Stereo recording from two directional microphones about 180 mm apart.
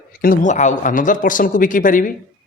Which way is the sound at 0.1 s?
55° left (ahead or behind).